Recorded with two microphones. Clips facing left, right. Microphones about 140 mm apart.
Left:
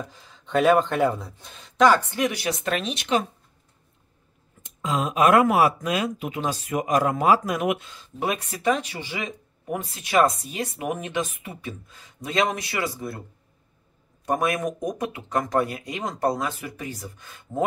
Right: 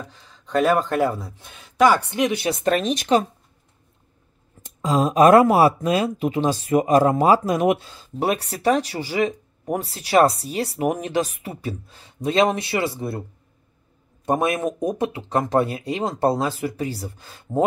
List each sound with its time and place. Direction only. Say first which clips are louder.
0.1 s speech: right 2 dB; centre (ahead or behind)
2.1 s speech: right 4 dB; 20° right (ahead or behind)
2.6 s speech: right 7 dB; 40° right (ahead or behind)
4.6 s speech: right 6 dB; 35° right (ahead or behind)
14.2 s speech: right 3 dB; 25° right (ahead or behind)